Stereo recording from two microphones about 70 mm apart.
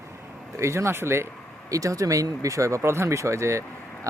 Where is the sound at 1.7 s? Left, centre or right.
Right.